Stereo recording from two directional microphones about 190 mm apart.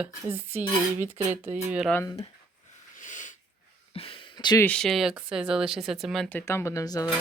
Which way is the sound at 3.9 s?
30° left (ahead or behind).